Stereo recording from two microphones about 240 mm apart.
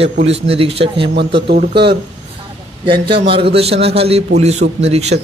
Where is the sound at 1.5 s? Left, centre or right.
Right.